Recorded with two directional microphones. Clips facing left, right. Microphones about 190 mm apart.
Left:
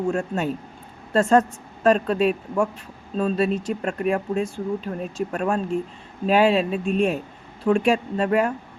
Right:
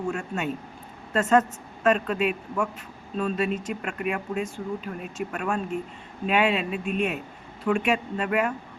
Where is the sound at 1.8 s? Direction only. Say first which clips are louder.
Left 4 dB; 35° left (ahead or behind).